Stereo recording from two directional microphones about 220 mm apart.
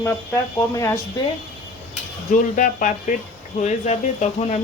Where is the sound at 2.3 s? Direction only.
35° left (ahead or behind).